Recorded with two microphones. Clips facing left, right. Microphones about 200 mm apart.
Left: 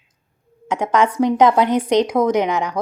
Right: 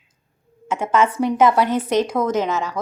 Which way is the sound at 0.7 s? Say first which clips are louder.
Left 1 dB; 15° left (ahead or behind).